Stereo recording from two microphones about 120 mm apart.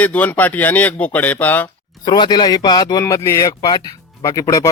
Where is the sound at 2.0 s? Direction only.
40° left (ahead or behind).